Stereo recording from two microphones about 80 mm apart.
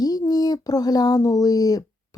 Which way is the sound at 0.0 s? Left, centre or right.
Left.